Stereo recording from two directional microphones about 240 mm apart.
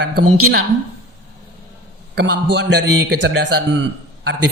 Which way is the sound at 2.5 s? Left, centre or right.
Right.